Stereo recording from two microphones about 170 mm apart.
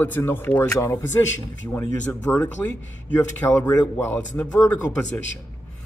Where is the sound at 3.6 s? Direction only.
15° left (ahead or behind).